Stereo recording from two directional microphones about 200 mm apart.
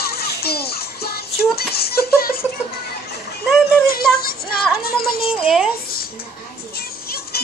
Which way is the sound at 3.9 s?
50° left (ahead or behind).